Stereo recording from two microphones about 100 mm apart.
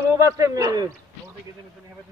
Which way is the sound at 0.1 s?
35° right (ahead or behind).